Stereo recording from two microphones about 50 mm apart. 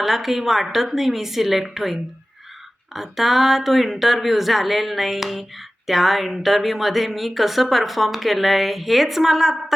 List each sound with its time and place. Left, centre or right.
0.0 s speech: centre